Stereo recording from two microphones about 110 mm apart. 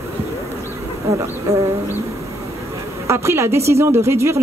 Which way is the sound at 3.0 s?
25° right (ahead or behind).